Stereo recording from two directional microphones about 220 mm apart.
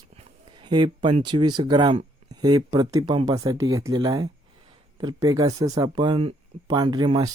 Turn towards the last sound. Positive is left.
turn(degrees=-20)  # may be behind; listen again after turning